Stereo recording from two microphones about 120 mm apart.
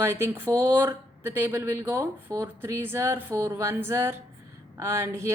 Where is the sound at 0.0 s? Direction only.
20° right (ahead or behind).